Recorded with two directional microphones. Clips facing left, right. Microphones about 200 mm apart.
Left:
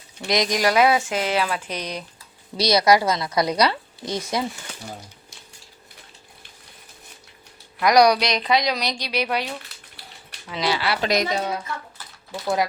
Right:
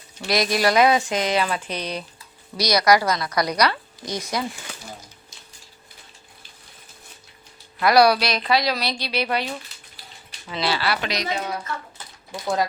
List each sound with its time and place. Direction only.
0.3 s speech: 20° left (ahead or behind)
2.6 s a woman's voice: 25° left (ahead or behind)
7.8 s speech: 15° left (ahead or behind)
10.5 s speech: 15° left (ahead or behind)
11.1 s a woman's voice: 50° left (ahead or behind)
12.0 s a sound: 20° right (ahead or behind)